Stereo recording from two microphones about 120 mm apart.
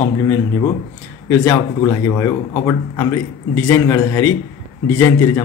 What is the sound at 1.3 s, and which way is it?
A man's voice, 20° left (ahead or behind).